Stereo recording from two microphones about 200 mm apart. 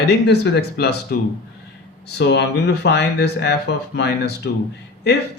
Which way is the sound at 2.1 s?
60° left (ahead or behind).